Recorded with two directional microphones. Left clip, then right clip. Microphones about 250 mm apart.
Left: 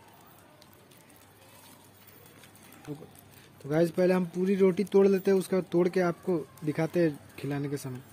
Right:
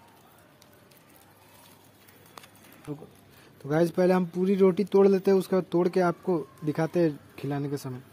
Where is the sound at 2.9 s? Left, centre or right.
Centre.